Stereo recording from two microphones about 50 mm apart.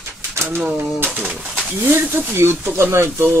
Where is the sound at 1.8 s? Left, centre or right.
Right.